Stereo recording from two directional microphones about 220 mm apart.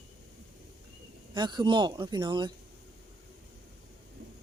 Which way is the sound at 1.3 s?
20° right (ahead or behind).